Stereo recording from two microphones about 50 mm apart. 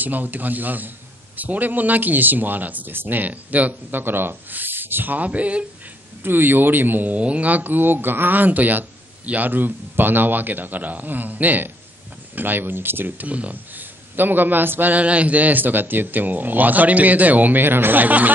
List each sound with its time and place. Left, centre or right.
0.0 s a man's voice: right
6.2 s a man's voice: right
13.3 s a man's voice: right